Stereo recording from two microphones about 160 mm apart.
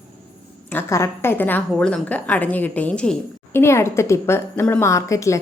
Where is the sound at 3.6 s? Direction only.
15° left (ahead or behind).